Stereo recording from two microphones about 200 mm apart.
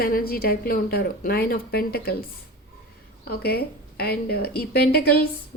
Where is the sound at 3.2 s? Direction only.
50° left (ahead or behind).